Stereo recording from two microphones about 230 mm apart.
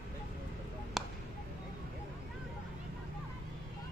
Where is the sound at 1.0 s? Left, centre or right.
Centre.